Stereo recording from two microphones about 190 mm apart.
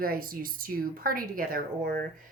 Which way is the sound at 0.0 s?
50° right (ahead or behind).